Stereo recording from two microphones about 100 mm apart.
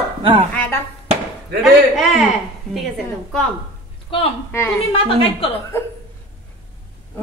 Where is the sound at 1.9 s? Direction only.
5° right (ahead or behind).